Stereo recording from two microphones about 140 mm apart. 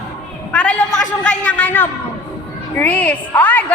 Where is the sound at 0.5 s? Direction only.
10° left (ahead or behind).